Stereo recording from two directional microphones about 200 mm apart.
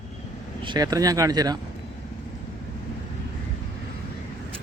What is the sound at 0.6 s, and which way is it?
Speech, 20° right (ahead or behind).